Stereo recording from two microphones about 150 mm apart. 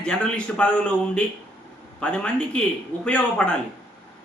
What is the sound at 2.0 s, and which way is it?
A man's voice, 10° left (ahead or behind).